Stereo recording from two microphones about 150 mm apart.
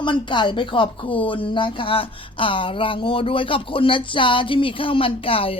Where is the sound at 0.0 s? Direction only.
30° left (ahead or behind).